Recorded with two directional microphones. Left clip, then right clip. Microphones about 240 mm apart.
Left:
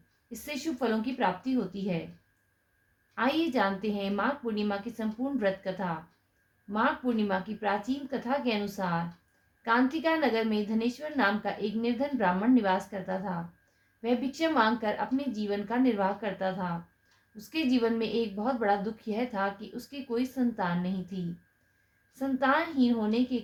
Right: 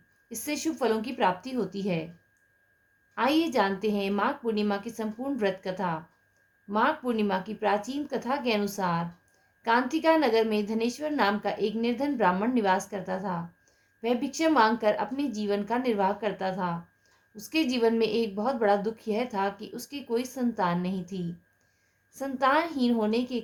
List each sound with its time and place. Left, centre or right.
0.3 s a woman's voice: right
3.2 s a woman's voice: right